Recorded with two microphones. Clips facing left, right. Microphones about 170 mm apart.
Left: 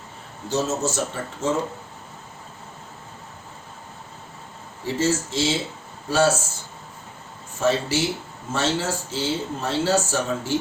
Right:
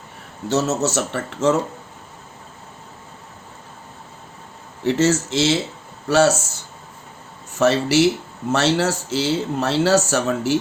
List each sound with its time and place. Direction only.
0.4 s speech: 70° right (ahead or behind)
4.8 s speech: 75° right (ahead or behind)
7.5 s speech: 75° right (ahead or behind)